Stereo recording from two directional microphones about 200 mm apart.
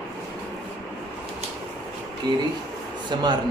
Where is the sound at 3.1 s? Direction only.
20° right (ahead or behind).